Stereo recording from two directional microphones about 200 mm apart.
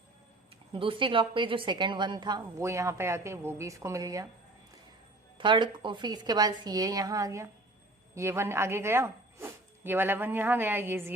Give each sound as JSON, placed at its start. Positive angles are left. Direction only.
{"t": 0.7, "sound": "a woman's voice", "side_deg": -25}
{"t": 5.4, "sound": "a woman's voice", "side_deg": -25}